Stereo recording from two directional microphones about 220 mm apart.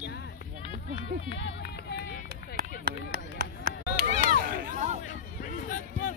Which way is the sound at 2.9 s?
45° right (ahead or behind).